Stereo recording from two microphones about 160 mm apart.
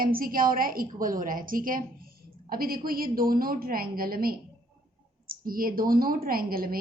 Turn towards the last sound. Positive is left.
turn(degrees=-65)  # may be behind; listen again after turning